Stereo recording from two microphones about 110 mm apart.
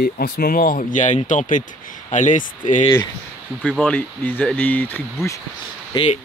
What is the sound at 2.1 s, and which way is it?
Speech, 90° left.